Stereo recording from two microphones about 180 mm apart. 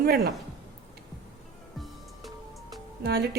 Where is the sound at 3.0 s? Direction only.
65° right (ahead or behind).